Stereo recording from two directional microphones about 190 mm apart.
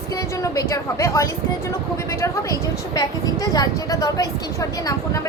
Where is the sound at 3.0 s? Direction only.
20° left (ahead or behind).